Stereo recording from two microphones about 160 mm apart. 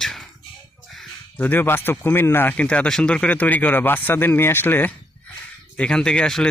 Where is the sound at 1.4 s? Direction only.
10° left (ahead or behind).